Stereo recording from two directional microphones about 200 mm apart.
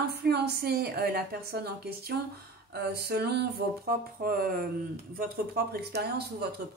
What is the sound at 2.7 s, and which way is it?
Speech, 50° right (ahead or behind).